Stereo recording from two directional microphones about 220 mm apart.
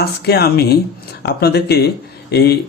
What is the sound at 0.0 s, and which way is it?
Speech, 45° left (ahead or behind).